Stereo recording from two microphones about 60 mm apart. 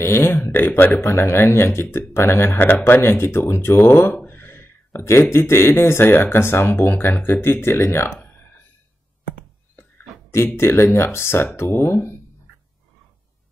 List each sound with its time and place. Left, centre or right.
0.0 s a man's voice: left
4.3 s a sound: left
5.3 s speech: left
9.8 s speech: left